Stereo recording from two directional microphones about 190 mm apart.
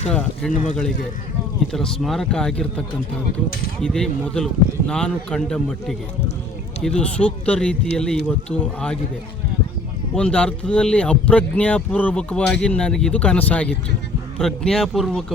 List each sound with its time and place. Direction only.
0.1 s speech: 5° left (ahead or behind)
0.5 s a man's voice: 45° left (ahead or behind)
1.6 s speech: 5° left (ahead or behind)
10.2 s speech: 5° left (ahead or behind)